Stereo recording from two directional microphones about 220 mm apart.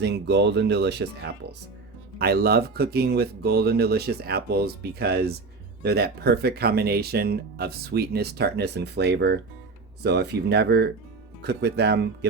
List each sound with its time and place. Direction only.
0.0 s speech: 50° right (ahead or behind)
2.1 s speech: 45° right (ahead or behind)